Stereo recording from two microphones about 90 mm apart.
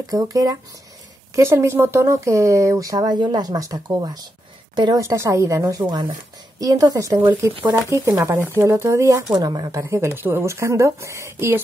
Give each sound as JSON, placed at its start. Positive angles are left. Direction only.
{"t": 0.0, "sound": "speech", "side_deg": -45}
{"t": 1.3, "sound": "speech", "side_deg": -30}
{"t": 4.9, "sound": "speech", "side_deg": -35}
{"t": 9.3, "sound": "speech", "side_deg": -50}
{"t": 9.8, "sound": "speech", "side_deg": -30}